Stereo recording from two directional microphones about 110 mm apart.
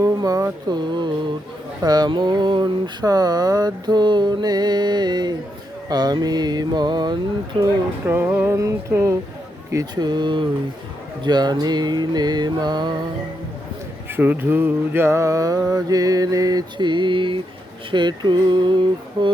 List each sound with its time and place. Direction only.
0.0 s a sound: 30° right (ahead or behind)
1.8 s mantra: 40° right (ahead or behind)
8.0 s music: 20° right (ahead or behind)
9.7 s mantra: 40° right (ahead or behind)
14.1 s mantra: 20° right (ahead or behind); by 17.4 s 50° right (ahead or behind)
17.9 s speech: 45° right (ahead or behind)